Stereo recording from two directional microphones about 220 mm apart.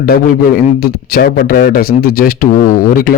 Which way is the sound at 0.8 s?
45° left (ahead or behind).